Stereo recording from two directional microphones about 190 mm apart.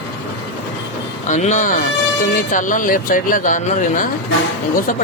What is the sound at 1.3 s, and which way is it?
Speech, 40° left (ahead or behind).